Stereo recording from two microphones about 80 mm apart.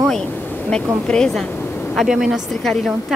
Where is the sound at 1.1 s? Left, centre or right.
Centre.